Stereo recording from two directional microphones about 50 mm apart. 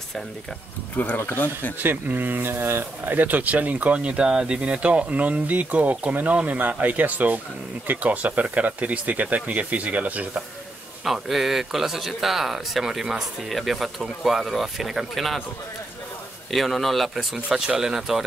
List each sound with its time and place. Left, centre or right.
0.9 s speech: left
1.8 s speech: right
11.1 s speech: centre
13.5 s speech: centre
16.5 s speech: centre